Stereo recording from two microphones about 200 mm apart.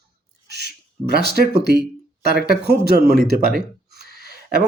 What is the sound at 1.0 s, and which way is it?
A man's voice, 55° right (ahead or behind).